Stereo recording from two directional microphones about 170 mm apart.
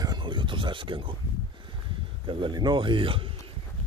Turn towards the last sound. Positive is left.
turn(degrees=-30)  # may be behind; listen again after turning